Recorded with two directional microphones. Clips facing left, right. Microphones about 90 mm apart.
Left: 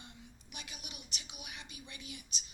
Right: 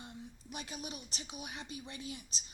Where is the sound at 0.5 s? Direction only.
35° right (ahead or behind).